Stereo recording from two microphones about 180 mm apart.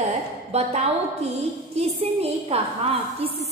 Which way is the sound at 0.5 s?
35° right (ahead or behind).